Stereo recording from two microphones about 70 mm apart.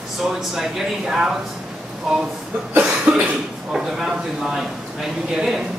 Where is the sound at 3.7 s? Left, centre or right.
Centre.